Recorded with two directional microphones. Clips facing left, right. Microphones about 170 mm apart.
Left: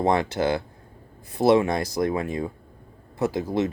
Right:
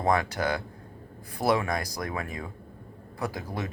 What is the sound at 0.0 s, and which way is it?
Speech, 25° left (ahead or behind).